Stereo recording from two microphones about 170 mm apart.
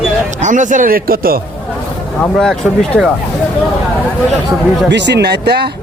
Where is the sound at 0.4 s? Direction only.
50° right (ahead or behind).